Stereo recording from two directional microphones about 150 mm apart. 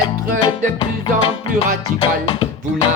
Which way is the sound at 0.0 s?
30° left (ahead or behind).